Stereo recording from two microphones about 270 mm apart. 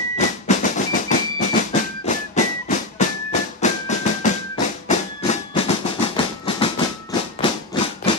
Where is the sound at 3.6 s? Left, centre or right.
Left.